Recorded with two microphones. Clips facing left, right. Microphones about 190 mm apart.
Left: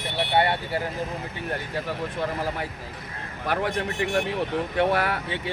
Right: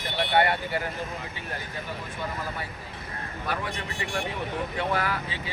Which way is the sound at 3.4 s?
65° left (ahead or behind).